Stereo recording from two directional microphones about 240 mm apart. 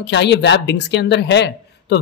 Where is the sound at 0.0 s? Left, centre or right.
Left.